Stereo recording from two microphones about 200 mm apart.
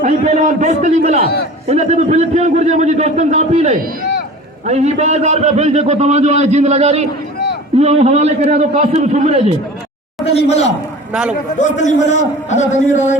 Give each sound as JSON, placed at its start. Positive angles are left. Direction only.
{"t": 0.0, "sound": "a man's voice", "side_deg": -40}
{"t": 10.2, "sound": "a man's voice", "side_deg": 30}
{"t": 11.1, "sound": "a man's voice", "side_deg": -5}
{"t": 12.0, "sound": "a man's voice", "side_deg": 35}